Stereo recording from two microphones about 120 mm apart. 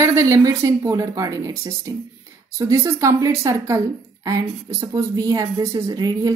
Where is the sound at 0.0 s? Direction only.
25° right (ahead or behind).